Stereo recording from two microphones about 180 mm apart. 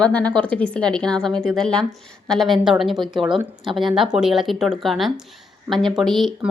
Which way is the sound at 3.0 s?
25° right (ahead or behind).